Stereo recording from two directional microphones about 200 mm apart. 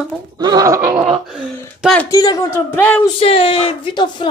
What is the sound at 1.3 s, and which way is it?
Speech, centre (ahead or behind).